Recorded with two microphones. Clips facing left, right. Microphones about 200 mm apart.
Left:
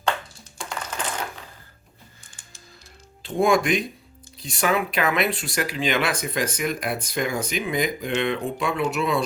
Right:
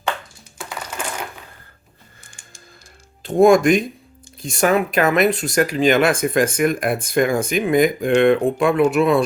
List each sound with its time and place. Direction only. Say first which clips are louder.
0.6 s coin: right 1 dB; 5° right (ahead or behind)
3.2 s speech: right 8 dB; 45° right (ahead or behind)